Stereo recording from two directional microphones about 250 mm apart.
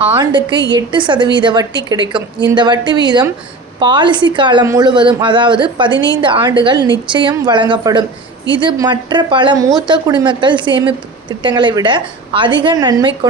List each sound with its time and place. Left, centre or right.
0.0 s a woman's voice: centre